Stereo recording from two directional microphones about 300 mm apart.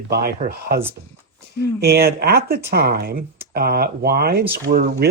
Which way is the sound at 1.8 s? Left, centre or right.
Right.